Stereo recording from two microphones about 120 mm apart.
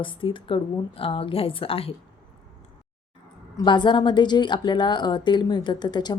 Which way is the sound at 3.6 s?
40° left (ahead or behind).